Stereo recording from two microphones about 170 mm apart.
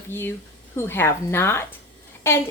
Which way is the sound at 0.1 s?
15° left (ahead or behind).